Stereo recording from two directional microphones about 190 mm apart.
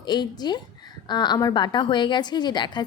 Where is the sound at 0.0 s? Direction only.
20° left (ahead or behind).